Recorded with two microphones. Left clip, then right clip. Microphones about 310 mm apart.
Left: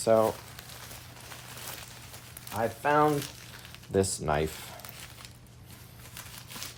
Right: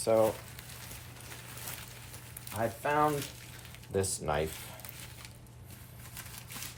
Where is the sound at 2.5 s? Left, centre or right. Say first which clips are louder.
Left 5 dB; left.